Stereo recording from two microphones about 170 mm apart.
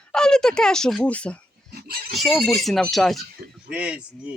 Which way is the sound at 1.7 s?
60° right (ahead or behind).